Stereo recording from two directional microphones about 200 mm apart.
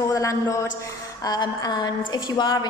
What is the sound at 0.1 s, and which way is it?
A woman's voice, 15° left (ahead or behind).